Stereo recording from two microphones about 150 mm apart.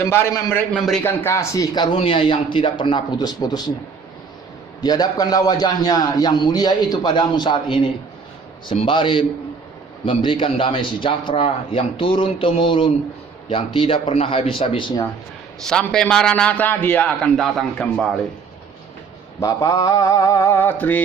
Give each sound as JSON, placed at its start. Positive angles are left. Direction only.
{"t": 0.0, "sound": "a man's voice", "side_deg": 15}
{"t": 4.8, "sound": "a man's voice", "side_deg": 25}
{"t": 15.6, "sound": "a man's voice", "side_deg": 5}
{"t": 19.4, "sound": "a man's voice", "side_deg": 20}